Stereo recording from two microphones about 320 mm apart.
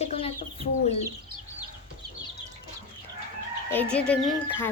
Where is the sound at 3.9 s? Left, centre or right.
Centre.